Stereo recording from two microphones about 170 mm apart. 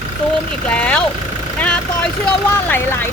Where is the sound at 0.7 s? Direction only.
5° left (ahead or behind).